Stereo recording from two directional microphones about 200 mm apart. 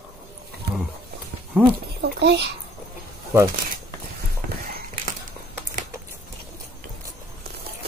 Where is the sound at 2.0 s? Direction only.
55° right (ahead or behind).